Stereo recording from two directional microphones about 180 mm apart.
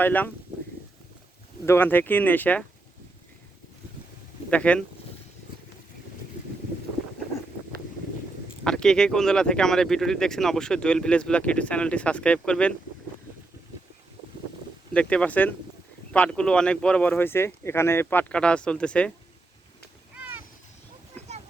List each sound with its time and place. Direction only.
0.0 s speech: 10° left (ahead or behind)
1.6 s speech: 15° left (ahead or behind)
4.4 s speech: 5° left (ahead or behind)
8.6 s speech: 5° left (ahead or behind)
14.9 s speech: 5° left (ahead or behind)